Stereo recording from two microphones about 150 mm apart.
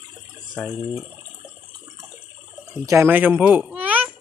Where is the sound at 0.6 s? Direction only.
5° left (ahead or behind).